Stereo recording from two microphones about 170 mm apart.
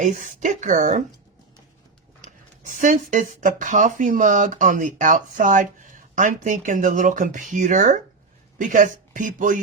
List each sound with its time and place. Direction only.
0.0 s speech: 45° right (ahead or behind)
2.2 s speech: 50° right (ahead or behind)